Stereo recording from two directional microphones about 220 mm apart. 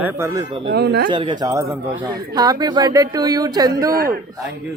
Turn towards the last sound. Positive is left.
turn(degrees=-15)  # may be behind; listen again after turning